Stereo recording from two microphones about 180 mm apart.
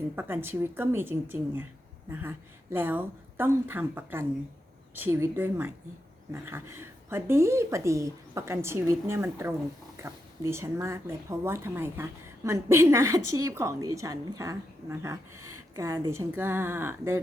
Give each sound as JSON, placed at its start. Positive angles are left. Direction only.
{"t": 0.2, "sound": "a woman's voice", "side_deg": -10}